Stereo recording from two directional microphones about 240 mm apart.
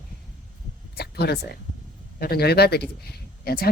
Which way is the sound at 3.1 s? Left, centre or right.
Left.